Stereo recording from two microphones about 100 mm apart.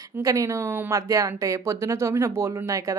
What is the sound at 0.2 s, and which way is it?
Speech, 30° right (ahead or behind).